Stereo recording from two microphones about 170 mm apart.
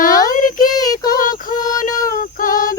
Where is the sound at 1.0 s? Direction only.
55° left (ahead or behind).